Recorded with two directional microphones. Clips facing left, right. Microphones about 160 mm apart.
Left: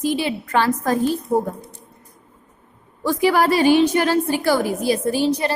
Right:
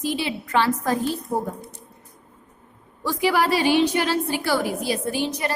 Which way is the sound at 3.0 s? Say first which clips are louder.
Left 4 dB; 50° left (ahead or behind).